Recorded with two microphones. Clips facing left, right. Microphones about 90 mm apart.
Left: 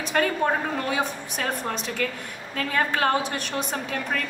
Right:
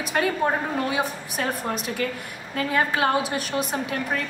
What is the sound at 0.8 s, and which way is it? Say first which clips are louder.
A woman's voice: right 1 dB; 5° right (ahead or behind).